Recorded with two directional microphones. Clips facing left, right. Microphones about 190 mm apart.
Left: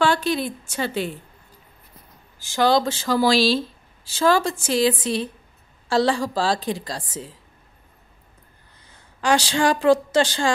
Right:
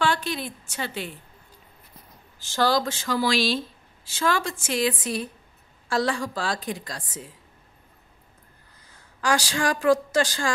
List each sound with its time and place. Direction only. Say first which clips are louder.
0.0 s a woman's voice: left 5 dB; 35° left (ahead or behind)
2.4 s speech: left 3 dB; 10° left (ahead or behind)
2.7 s speech: left 5 dB; 30° left (ahead or behind)
9.2 s speech: left 5 dB; 25° left (ahead or behind)